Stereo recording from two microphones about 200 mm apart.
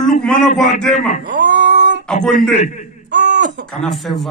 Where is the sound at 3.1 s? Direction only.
60° right (ahead or behind).